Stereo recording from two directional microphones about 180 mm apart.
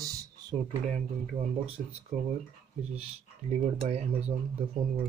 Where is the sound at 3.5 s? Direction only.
35° right (ahead or behind).